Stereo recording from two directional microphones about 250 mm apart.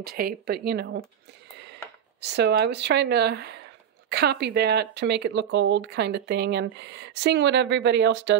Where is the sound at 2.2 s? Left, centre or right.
Right.